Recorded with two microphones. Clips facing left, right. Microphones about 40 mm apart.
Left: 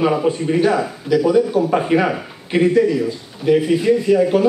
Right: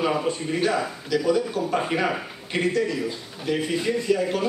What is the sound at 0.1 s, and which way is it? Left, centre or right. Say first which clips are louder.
A man's voice: left 7 dB; centre.